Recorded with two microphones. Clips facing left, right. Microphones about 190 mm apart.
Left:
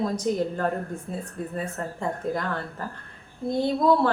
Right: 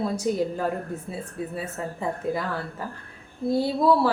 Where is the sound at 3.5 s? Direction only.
5° right (ahead or behind).